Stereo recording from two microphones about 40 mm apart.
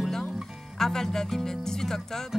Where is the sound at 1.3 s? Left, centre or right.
Centre.